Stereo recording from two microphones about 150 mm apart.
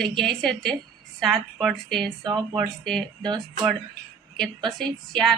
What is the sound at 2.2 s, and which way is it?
Speech, 30° right (ahead or behind).